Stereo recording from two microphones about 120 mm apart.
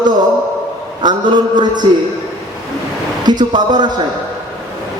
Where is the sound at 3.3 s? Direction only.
35° right (ahead or behind).